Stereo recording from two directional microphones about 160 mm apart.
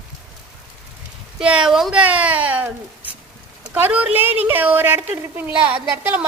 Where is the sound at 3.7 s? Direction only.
10° right (ahead or behind).